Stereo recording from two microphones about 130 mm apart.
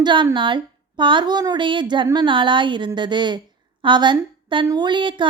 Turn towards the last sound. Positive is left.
turn(degrees=-40)  # may be behind; listen again after turning